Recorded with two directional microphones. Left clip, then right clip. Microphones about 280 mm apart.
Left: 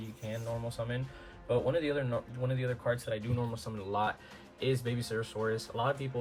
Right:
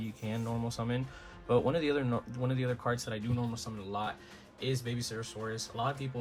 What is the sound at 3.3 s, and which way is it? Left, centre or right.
Speech, centre.